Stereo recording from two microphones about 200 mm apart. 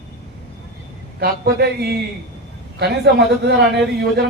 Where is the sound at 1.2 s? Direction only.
50° right (ahead or behind).